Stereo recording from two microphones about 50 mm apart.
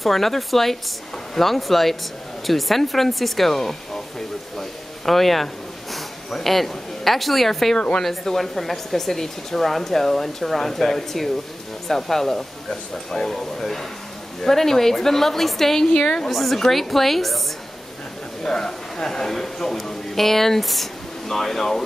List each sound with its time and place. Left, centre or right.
0.0 s speech: centre
4.6 s a sound: centre
8.0 s a man's voice: centre
15.9 s a man's voice: centre
16.3 s speech: centre
18.4 s a man's voice: centre